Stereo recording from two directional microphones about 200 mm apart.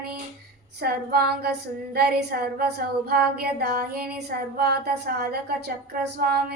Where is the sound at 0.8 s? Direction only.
50° right (ahead or behind).